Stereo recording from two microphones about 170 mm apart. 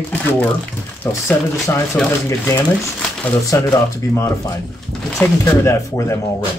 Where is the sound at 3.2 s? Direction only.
20° left (ahead or behind).